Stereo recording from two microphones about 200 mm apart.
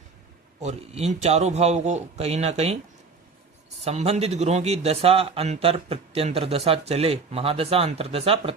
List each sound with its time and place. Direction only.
0.6 s a man's voice: 35° right (ahead or behind)
3.8 s a man's voice: 30° right (ahead or behind)